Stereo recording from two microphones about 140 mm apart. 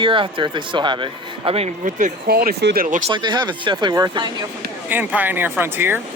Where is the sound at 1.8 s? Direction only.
80° right.